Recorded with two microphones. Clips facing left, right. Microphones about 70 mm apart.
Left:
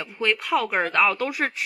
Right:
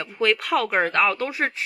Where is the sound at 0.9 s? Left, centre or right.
Right.